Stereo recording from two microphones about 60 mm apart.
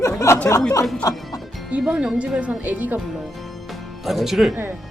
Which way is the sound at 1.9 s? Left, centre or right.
Centre.